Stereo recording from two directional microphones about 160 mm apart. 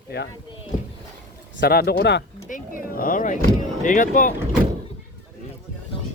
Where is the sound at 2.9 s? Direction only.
60° left (ahead or behind).